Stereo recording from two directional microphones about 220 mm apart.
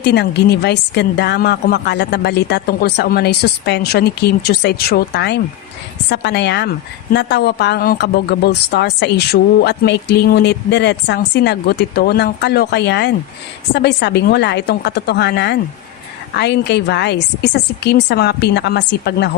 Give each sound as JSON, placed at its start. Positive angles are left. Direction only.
{"t": 0.0, "sound": "speech", "side_deg": 50}